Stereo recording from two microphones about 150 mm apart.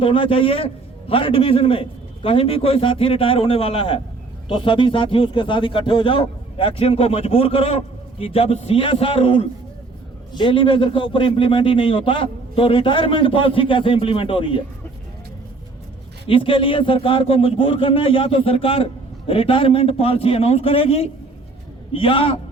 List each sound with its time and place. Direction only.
0.0 s a man's voice: 35° left (ahead or behind)
16.2 s a man's voice: 35° left (ahead or behind)